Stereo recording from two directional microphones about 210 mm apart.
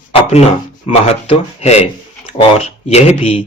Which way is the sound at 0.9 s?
30° left (ahead or behind).